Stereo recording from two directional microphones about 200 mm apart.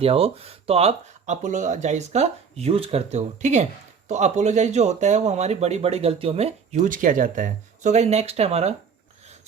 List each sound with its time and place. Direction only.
0.0 s speech: 30° right (ahead or behind)